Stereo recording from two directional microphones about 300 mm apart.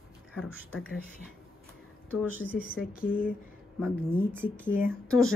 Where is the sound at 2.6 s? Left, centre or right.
Left.